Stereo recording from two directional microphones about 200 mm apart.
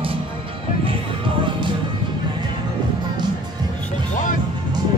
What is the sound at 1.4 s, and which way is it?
Music, 25° right (ahead or behind).